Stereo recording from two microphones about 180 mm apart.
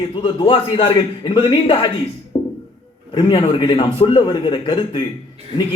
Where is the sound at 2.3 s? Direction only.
30° left (ahead or behind).